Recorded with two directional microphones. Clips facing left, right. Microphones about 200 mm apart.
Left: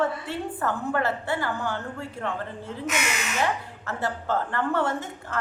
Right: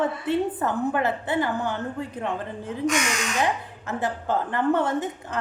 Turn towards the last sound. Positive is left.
turn(degrees=-20)  # may be behind; listen again after turning